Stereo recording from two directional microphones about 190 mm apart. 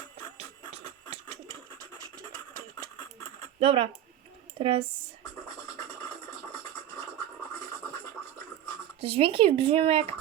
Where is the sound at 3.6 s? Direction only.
30° right (ahead or behind).